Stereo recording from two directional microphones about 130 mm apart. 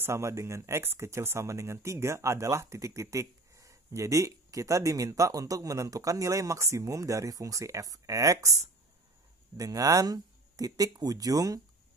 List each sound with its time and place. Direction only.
0.0 s speech: 20° right (ahead or behind)
9.6 s speech: 25° right (ahead or behind)